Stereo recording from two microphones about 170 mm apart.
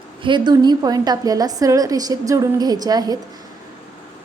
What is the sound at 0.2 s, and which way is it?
A woman's voice, 30° right (ahead or behind).